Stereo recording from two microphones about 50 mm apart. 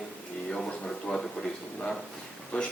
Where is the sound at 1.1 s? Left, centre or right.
Centre.